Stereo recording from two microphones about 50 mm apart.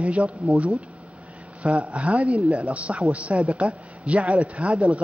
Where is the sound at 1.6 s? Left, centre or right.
Right.